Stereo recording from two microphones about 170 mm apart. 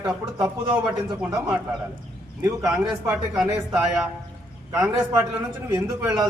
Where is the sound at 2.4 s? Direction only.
20° right (ahead or behind).